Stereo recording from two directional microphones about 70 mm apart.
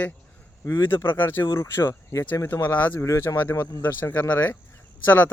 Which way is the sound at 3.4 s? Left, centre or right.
Left.